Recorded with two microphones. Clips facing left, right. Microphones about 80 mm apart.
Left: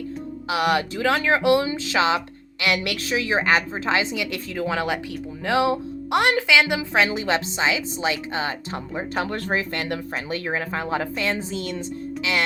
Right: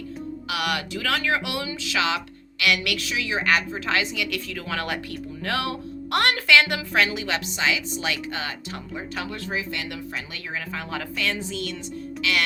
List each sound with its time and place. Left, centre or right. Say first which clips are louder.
0.4 s a woman's voice: left 7 dB; left
7.1 s speech: left 5 dB; left